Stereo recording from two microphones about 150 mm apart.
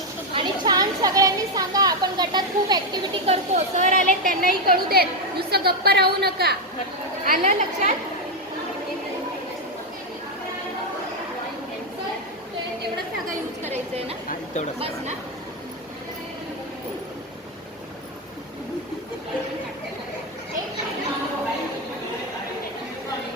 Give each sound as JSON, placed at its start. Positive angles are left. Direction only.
{"t": 0.3, "sound": "speech", "side_deg": -30}
{"t": 3.2, "sound": "a woman's voice", "side_deg": -55}
{"t": 7.3, "sound": "a woman's voice", "side_deg": -60}
{"t": 13.7, "sound": "chatter", "side_deg": -45}